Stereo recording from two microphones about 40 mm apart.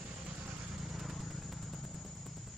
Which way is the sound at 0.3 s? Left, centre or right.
Right.